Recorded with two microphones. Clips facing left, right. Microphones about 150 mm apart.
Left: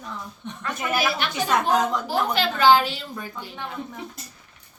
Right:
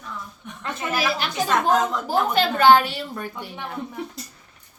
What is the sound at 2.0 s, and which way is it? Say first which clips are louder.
Speech: right 3 dB; 50° right (ahead or behind).